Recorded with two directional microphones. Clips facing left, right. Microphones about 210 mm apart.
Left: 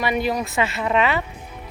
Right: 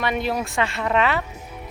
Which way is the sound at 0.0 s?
5° left (ahead or behind).